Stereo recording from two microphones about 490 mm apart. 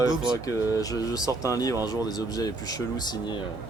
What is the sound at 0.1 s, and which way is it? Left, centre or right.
Speech, centre.